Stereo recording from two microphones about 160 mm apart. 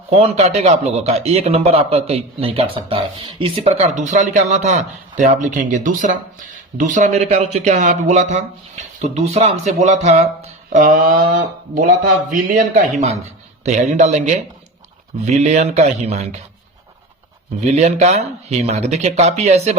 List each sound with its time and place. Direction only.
0.1 s speech: 40° right (ahead or behind)
17.7 s speech: 45° right (ahead or behind)